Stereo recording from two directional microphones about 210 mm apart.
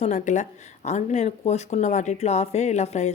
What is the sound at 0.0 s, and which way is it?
A woman's voice, 35° left (ahead or behind).